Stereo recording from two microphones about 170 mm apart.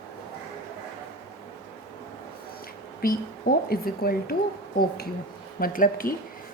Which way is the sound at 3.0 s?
60° left (ahead or behind).